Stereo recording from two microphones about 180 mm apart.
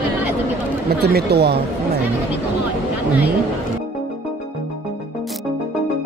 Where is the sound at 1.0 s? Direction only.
65° right (ahead or behind).